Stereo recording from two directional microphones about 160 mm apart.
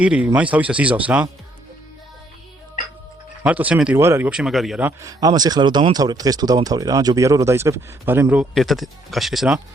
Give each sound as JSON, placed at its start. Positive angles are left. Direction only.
{"t": 0.0, "sound": "speech", "side_deg": -10}
{"t": 3.4, "sound": "speech", "side_deg": -10}
{"t": 4.3, "sound": "speech", "side_deg": -5}
{"t": 4.9, "sound": "speech", "side_deg": -20}